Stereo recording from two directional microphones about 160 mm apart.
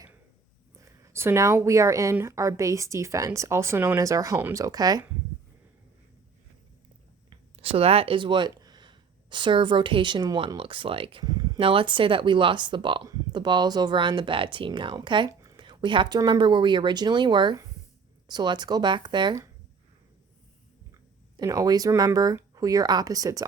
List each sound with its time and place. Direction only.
0.8 s a woman's voice: 20° right (ahead or behind)
7.3 s a woman's voice: 35° right (ahead or behind)
21.3 s a woman's voice: 20° right (ahead or behind)